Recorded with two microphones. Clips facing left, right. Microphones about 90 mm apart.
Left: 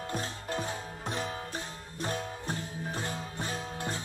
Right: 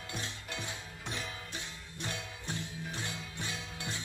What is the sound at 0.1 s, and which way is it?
Music, 40° left (ahead or behind).